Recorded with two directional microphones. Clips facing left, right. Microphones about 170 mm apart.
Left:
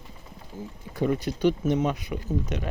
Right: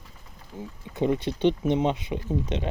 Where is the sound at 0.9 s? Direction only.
25° right (ahead or behind).